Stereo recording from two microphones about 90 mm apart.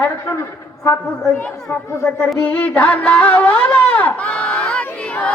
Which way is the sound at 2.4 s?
15° left (ahead or behind).